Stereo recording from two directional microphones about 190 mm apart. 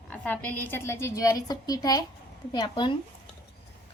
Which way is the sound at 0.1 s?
10° left (ahead or behind).